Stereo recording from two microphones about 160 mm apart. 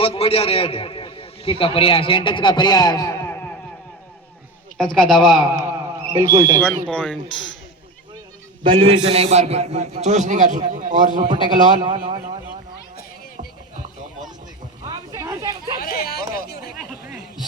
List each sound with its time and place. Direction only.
0.0 s a man's voice: 35° left (ahead or behind); by 3.5 s 15° left (ahead or behind)
4.8 s speech: 5° left (ahead or behind)
5.6 s a sound: 20° right (ahead or behind)
6.8 s speech: 5° left (ahead or behind)
8.6 s a man's voice: 35° right (ahead or behind); by 11.2 s 50° right (ahead or behind)
11.2 s a man's voice: 30° right (ahead or behind)
13.3 s music: 50° right (ahead or behind)
14.8 s a sound: 25° right (ahead or behind)
15.8 s chatter: 70° left (ahead or behind)
16.3 s a sound: 75° left (ahead or behind)